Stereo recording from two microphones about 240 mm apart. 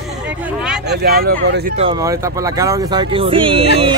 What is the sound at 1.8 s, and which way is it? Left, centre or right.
Speech, centre.